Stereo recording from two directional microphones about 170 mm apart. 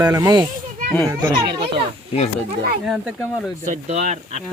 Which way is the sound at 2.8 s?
Centre (ahead or behind).